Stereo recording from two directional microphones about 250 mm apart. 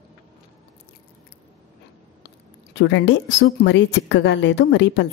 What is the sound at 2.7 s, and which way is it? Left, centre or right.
A woman's voice, left.